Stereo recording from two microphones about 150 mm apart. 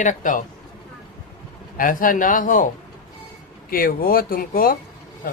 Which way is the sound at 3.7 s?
80° left.